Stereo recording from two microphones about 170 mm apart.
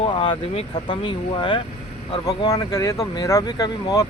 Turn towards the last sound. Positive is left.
turn(degrees=20)  # may be behind; listen again after turning